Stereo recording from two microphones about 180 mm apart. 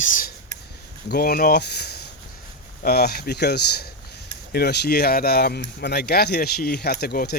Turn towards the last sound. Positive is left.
turn(degrees=55)  # may be behind; listen again after turning